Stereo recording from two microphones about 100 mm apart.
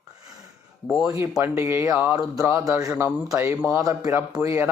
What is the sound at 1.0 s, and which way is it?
Speech, 25° right (ahead or behind).